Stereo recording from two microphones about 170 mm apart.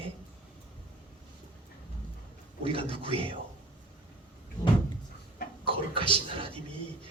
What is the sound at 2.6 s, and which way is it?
Speech, 35° right (ahead or behind).